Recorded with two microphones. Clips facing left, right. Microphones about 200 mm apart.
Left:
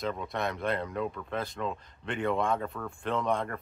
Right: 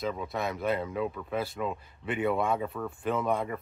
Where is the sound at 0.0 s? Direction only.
5° right (ahead or behind).